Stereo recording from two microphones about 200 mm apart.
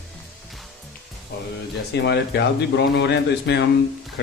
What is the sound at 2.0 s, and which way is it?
Speech, 60° left (ahead or behind).